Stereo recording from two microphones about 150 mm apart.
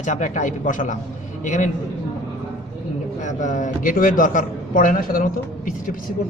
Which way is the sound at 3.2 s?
55° left (ahead or behind).